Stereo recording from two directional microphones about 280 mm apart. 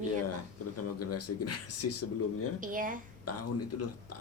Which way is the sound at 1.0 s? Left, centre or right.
Left.